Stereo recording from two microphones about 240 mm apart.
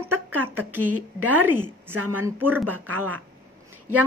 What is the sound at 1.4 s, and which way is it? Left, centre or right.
A woman's voice, centre.